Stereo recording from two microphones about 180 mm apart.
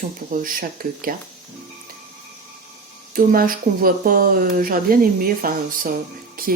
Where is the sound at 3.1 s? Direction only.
50° right (ahead or behind).